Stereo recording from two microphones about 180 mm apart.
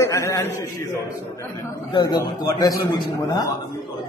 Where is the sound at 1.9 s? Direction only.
25° left (ahead or behind).